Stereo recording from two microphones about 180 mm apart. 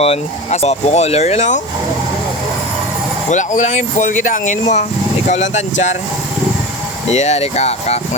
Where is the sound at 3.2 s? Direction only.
45° left (ahead or behind).